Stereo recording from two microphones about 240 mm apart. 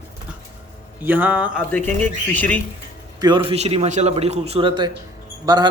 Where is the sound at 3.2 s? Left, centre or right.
Right.